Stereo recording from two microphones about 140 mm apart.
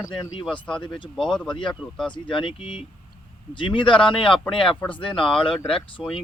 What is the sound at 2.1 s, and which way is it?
Speech, 35° left (ahead or behind).